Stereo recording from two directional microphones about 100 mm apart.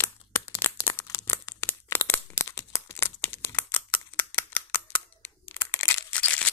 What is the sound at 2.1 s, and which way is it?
Crumpling, 30° left (ahead or behind).